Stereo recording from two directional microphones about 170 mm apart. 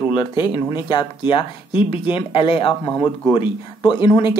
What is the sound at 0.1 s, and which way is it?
Speech, 30° left (ahead or behind).